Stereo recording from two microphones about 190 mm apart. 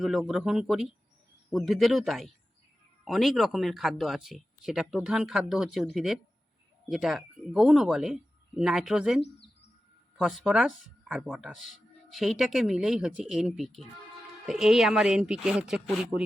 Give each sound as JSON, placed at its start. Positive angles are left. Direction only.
{"t": 0.0, "sound": "speech", "side_deg": 0}
{"t": 9.2, "sound": "bird", "side_deg": 65}
{"t": 10.2, "sound": "speech", "side_deg": 0}